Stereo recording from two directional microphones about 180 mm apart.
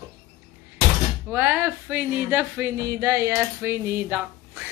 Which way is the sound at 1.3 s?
10° right (ahead or behind).